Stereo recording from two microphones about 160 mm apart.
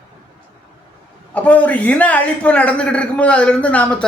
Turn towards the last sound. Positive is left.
turn(degrees=10)  # may be behind; listen again after turning